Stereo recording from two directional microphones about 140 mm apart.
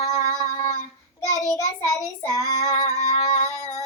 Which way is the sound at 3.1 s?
45° left (ahead or behind).